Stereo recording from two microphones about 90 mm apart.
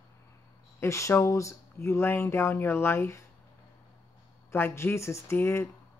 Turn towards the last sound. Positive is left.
turn(degrees=30)  # may be behind; listen again after turning